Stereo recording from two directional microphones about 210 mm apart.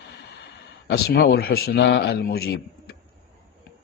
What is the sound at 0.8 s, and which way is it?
A man's voice, 50° left (ahead or behind).